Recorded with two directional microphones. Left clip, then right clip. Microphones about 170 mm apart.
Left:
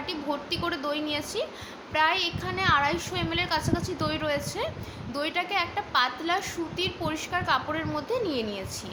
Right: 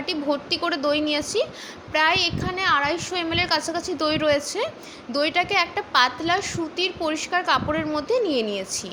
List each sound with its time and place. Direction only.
0.0 s a woman's voice: 30° right (ahead or behind)